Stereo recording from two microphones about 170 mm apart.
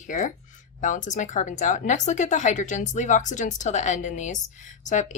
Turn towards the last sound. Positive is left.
turn(degrees=45)  # may be behind; listen again after turning